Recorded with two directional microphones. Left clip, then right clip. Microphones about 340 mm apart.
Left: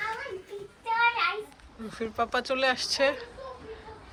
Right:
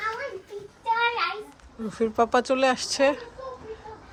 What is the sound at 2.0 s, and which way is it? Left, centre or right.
Speech, centre.